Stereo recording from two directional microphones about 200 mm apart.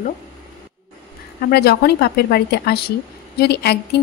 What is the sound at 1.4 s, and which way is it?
A woman's voice, 55° left (ahead or behind).